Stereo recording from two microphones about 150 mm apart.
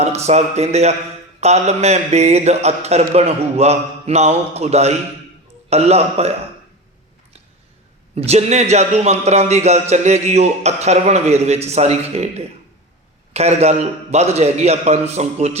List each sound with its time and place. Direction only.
0.0 s speech: 45° right (ahead or behind)
8.1 s speech: 45° right (ahead or behind)
13.3 s speech: 45° right (ahead or behind)